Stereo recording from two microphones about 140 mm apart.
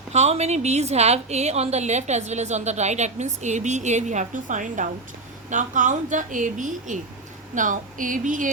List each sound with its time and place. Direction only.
0.1 s a woman's voice: 50° right (ahead or behind); by 8.4 s 70° right (ahead or behind)